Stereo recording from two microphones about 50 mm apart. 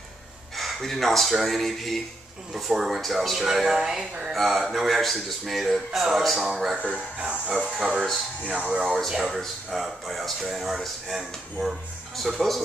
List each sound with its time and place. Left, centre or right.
0.6 s speech: centre
7.2 s speech: right
8.9 s speech: centre